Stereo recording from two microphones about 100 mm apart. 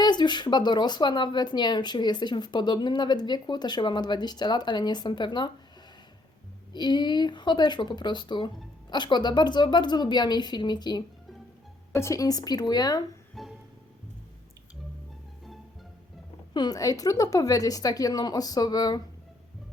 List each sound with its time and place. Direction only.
0.0 s a woman's voice: 45° left (ahead or behind)
6.7 s a woman's voice: 45° left (ahead or behind)
11.9 s a woman's voice: 30° left (ahead or behind)
13.4 s music: centre (ahead or behind)
16.6 s a woman's voice: 40° left (ahead or behind)